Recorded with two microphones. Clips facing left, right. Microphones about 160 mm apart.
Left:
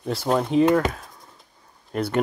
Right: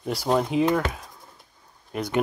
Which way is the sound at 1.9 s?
10° right (ahead or behind).